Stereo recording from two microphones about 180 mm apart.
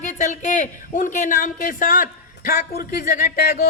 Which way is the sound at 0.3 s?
40° left (ahead or behind).